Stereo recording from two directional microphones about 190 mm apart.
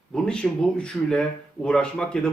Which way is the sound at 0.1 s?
5° left (ahead or behind).